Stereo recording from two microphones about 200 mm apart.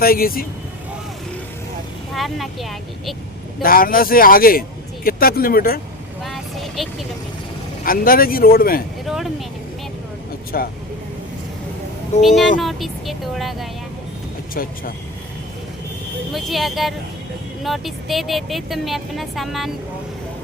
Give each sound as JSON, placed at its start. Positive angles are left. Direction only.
{"t": 0.0, "sound": "a man's voice", "side_deg": 45}
{"t": 2.1, "sound": "a woman's voice", "side_deg": 0}
{"t": 3.6, "sound": "a man's voice", "side_deg": 45}
{"t": 6.2, "sound": "vehicle", "side_deg": 0}
{"t": 7.9, "sound": "a man's voice", "side_deg": 45}
{"t": 9.0, "sound": "a woman's voice", "side_deg": 0}
{"t": 10.5, "sound": "a man's voice", "side_deg": 45}
{"t": 12.2, "sound": "a woman's voice", "side_deg": 0}
{"t": 14.5, "sound": "a man's voice", "side_deg": 45}
{"t": 16.3, "sound": "a woman's voice", "side_deg": 0}